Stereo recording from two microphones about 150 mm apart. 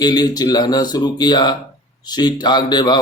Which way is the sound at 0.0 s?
25° left (ahead or behind).